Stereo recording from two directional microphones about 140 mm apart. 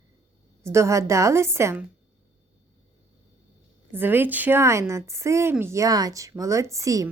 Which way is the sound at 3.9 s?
15° right (ahead or behind).